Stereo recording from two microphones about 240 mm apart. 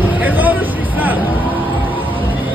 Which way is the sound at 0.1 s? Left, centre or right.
Centre.